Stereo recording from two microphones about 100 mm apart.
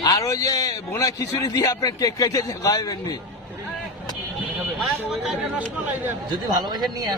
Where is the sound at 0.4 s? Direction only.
35° left (ahead or behind).